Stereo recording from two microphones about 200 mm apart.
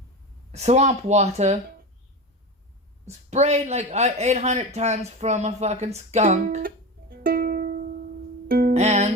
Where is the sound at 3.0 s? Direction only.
35° right (ahead or behind).